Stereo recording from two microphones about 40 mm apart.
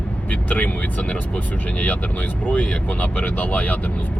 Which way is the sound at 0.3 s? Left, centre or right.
Left.